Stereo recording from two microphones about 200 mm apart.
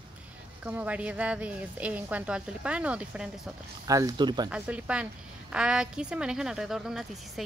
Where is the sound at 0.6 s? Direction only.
5° right (ahead or behind).